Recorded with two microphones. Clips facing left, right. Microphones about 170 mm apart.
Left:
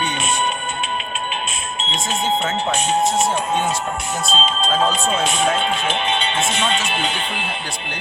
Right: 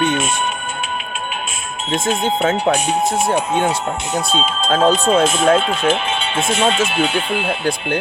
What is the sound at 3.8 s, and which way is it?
Speech, 20° right (ahead or behind).